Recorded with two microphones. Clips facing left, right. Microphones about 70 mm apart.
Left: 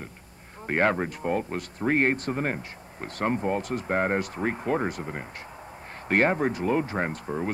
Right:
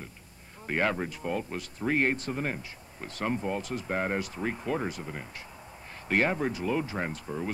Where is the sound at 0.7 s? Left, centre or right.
Left.